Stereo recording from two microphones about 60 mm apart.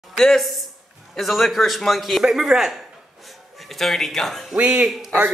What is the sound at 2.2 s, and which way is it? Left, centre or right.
Speech, centre.